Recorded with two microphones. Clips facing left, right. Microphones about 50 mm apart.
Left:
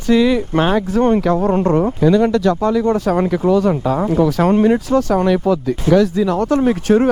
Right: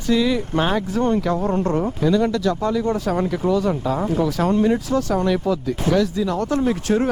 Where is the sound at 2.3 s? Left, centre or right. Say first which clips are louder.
Left 6 dB; centre.